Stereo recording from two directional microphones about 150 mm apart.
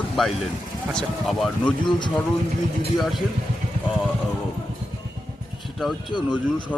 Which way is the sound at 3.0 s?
Centre (ahead or behind).